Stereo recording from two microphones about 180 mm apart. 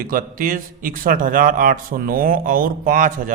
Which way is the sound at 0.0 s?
50° right (ahead or behind).